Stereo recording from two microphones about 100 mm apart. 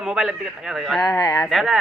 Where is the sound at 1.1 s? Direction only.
35° left (ahead or behind).